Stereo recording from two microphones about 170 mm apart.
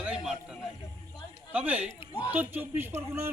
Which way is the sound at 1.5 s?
10° right (ahead or behind).